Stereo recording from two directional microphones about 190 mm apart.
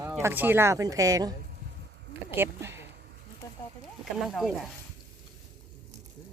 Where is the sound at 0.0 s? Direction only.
15° right (ahead or behind).